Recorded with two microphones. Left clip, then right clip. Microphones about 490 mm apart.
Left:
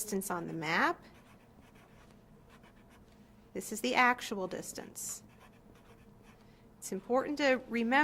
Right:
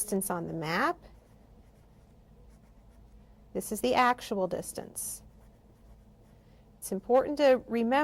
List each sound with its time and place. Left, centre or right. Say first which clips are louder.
0.0 s a woman's voice: right 4 dB; right
3.5 s a woman's voice: right 4 dB; right
6.8 s a woman's voice: right 7 dB; right